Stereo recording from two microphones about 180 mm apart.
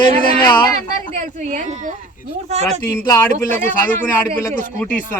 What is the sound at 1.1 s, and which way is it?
Speech, 45° right (ahead or behind).